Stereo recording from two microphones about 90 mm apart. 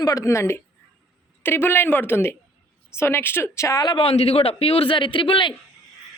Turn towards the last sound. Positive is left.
turn(degrees=70)  # may be behind; listen again after turning